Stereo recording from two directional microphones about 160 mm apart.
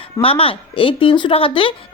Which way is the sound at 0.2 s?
35° left (ahead or behind).